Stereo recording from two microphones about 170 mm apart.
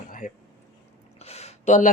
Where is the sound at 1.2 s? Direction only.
40° left (ahead or behind).